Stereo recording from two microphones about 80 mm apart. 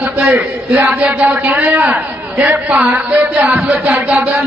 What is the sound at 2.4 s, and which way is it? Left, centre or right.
Music, right.